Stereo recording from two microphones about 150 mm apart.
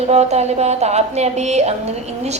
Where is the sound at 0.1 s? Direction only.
45° right (ahead or behind).